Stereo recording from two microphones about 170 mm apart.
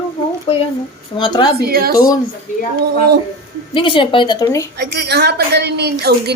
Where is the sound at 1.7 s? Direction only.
65° right (ahead or behind).